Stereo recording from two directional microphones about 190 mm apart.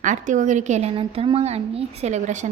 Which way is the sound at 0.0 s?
40° right (ahead or behind).